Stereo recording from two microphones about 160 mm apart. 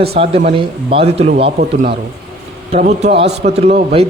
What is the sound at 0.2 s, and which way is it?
A man's voice, 35° right (ahead or behind).